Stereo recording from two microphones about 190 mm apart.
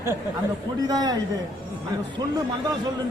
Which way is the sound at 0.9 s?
20° right (ahead or behind).